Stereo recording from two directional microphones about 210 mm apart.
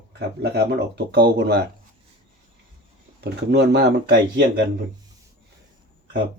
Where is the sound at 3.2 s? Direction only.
55° right (ahead or behind).